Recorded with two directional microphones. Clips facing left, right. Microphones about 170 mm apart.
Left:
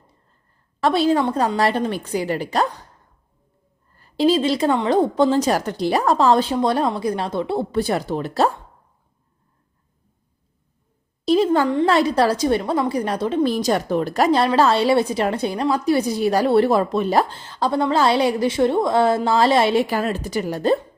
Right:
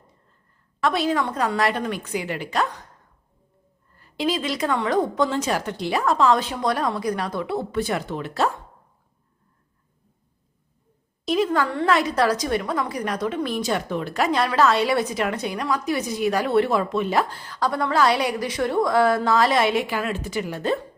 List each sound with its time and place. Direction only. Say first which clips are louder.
0.8 s a woman's voice: left 5 dB; 30° left (ahead or behind)
3.9 s a woman's voice: left 7 dB; 35° left (ahead or behind)
11.3 s a woman's voice: left 5 dB; 30° left (ahead or behind)